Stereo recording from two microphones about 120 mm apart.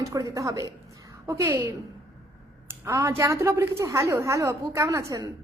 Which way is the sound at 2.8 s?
25° right (ahead or behind).